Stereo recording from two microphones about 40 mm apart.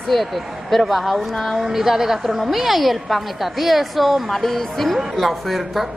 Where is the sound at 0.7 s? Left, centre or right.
Centre.